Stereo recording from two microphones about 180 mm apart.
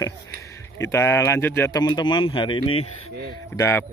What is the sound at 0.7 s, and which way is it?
Speech, 15° left (ahead or behind).